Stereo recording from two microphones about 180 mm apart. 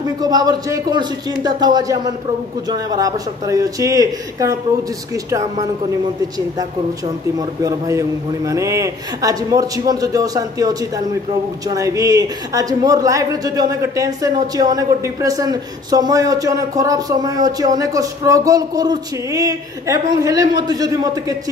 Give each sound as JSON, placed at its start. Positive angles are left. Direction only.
{"t": 0.0, "sound": "a woman's voice", "side_deg": -20}
{"t": 7.3, "sound": "a woman's voice", "side_deg": -20}